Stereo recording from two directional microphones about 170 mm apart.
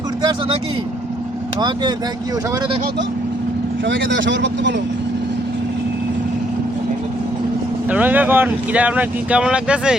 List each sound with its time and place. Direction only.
3.8 s speech: 90° right
7.9 s speech: 10° right (ahead or behind)